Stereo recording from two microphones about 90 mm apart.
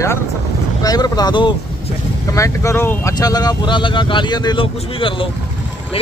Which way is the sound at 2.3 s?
35° left (ahead or behind).